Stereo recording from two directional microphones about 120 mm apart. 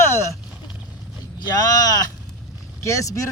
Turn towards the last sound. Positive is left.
turn(degrees=25)  # may be behind; listen again after turning